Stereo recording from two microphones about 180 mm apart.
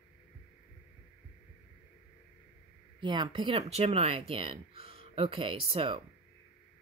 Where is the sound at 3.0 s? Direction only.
25° right (ahead or behind).